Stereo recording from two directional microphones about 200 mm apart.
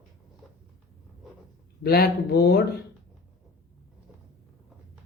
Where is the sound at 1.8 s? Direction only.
50° left (ahead or behind).